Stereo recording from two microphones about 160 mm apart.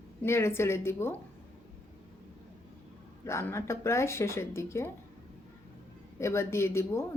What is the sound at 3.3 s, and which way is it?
A woman's voice, 15° left (ahead or behind).